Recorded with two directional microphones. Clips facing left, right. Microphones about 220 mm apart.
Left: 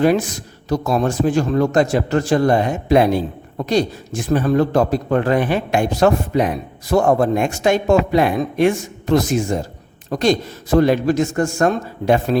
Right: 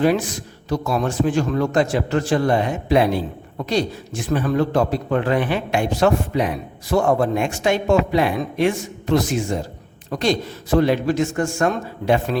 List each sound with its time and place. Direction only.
0.0 s a man's voice: 45° left (ahead or behind)